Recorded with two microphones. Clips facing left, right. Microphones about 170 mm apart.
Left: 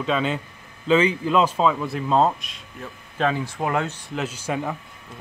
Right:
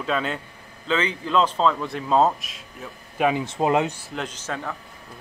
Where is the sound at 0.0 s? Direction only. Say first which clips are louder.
Left 2 dB; centre (ahead or behind).